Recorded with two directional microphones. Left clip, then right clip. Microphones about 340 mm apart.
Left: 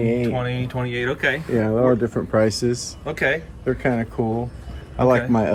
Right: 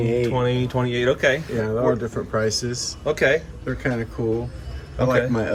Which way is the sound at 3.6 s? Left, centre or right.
Left.